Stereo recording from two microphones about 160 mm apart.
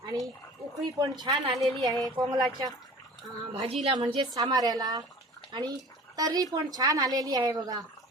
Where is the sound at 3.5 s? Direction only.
40° right (ahead or behind); by 5.0 s 25° right (ahead or behind).